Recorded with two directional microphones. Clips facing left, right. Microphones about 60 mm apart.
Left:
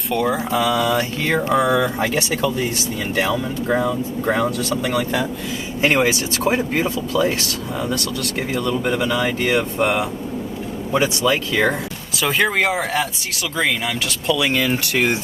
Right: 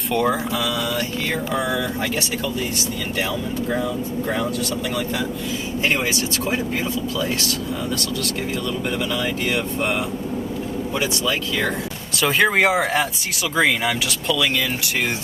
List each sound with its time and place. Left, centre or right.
0.1 s speech: centre
0.5 s speech: left
0.9 s mantra: left
1.6 s speech: left
3.2 s speech: left
8.9 s speech: left
10.9 s speech: left
12.1 s speech: centre